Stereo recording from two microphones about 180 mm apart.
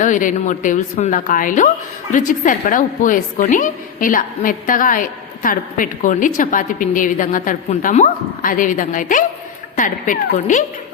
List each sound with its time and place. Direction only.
0.0 s a woman's voice: 45° left (ahead or behind)